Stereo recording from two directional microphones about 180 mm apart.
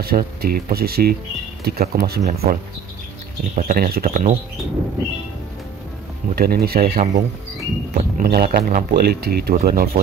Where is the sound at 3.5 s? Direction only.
50° right (ahead or behind).